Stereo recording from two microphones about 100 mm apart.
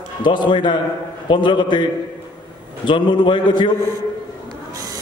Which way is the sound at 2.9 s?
50° left (ahead or behind).